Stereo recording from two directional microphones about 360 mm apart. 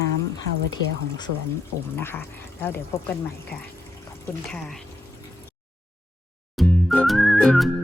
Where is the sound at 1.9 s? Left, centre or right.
Centre.